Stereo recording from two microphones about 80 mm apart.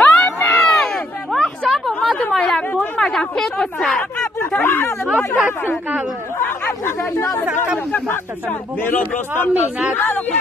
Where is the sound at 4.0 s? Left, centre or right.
Left.